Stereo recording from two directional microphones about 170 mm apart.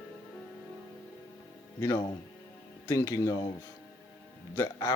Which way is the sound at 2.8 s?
15° left (ahead or behind).